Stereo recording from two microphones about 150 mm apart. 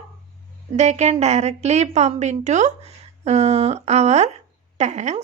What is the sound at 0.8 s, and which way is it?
A woman's voice, 50° right (ahead or behind).